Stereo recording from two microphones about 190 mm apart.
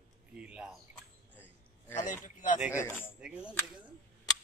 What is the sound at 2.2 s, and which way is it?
Speech, 45° left (ahead or behind).